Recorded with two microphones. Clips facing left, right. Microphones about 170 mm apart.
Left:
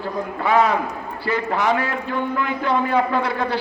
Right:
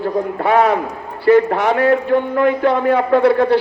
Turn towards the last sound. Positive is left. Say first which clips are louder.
# right 10 dB
turn(degrees=-60)  # may be behind; listen again after turning